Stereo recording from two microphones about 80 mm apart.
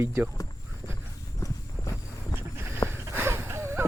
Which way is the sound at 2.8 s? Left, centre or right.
Left.